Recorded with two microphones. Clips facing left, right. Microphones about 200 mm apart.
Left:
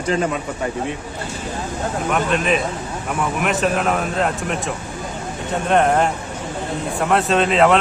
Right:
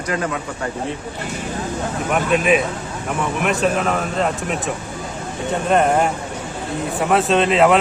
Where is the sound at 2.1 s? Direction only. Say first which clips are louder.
Right 3 dB; 5° right (ahead or behind).